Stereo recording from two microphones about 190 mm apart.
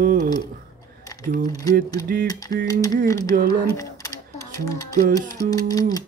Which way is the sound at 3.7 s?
15° left (ahead or behind).